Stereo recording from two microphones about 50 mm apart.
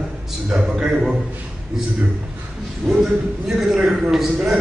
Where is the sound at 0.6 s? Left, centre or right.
Centre.